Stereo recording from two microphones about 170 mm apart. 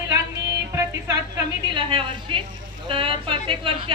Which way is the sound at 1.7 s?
30° right (ahead or behind).